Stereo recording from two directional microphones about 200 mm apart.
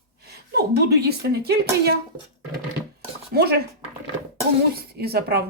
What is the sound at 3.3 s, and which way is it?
Speech, 50° right (ahead or behind).